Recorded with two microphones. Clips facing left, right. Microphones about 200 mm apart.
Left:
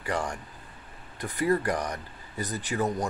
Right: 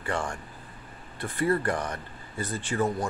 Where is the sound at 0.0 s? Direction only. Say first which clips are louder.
Even; 10° left (ahead or behind).